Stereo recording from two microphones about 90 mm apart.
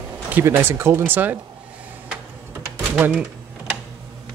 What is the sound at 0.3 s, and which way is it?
Speech, 25° right (ahead or behind).